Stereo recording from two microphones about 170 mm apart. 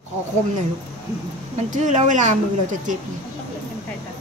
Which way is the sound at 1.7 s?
45° right (ahead or behind).